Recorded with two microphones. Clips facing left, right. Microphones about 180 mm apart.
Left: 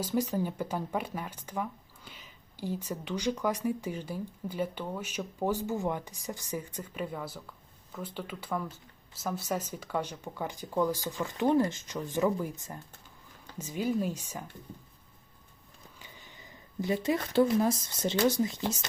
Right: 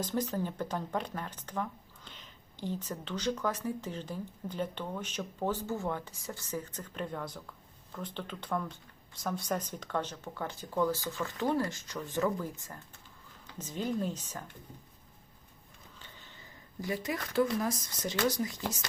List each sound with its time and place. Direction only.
0.0 s speech: 10° left (ahead or behind)
16.0 s a sound: 10° left (ahead or behind)
16.8 s speech: 25° left (ahead or behind)